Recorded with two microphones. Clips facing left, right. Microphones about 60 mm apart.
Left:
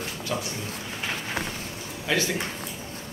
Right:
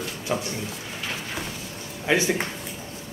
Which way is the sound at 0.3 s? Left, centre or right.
Right.